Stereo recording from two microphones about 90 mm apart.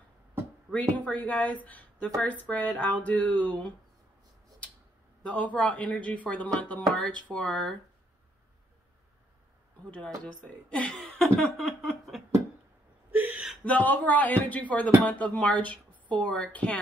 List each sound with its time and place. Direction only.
0.7 s a woman's voice: 15° left (ahead or behind)
5.3 s a woman's voice: 15° left (ahead or behind)
10.2 s a woman's voice: 15° left (ahead or behind)
11.0 s a sound: 10° left (ahead or behind)
13.1 s whimper: 15° right (ahead or behind)
13.7 s a woman's voice: 15° left (ahead or behind)